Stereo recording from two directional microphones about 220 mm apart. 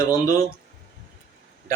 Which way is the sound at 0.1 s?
15° left (ahead or behind).